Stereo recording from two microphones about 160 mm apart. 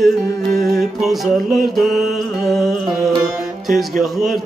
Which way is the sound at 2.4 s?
Centre (ahead or behind).